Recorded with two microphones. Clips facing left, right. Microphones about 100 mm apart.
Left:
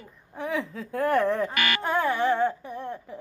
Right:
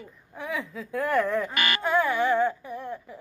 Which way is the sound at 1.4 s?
35° left (ahead or behind).